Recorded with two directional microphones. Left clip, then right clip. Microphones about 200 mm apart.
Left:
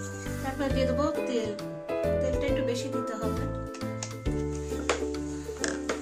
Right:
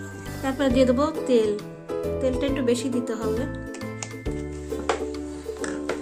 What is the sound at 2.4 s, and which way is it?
Speech, 60° right (ahead or behind).